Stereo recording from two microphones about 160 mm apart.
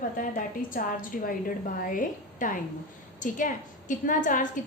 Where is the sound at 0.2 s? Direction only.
55° left (ahead or behind).